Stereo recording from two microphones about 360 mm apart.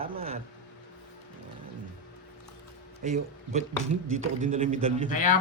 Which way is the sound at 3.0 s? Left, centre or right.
Centre.